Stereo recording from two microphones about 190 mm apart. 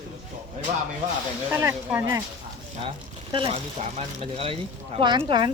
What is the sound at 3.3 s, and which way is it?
Speech, 30° right (ahead or behind).